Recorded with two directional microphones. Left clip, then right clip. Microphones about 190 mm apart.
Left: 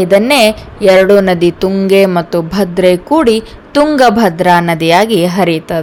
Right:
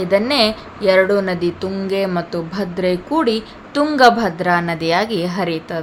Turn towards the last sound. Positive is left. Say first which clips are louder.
# left 9 dB
turn(degrees=35)  # may be behind; listen again after turning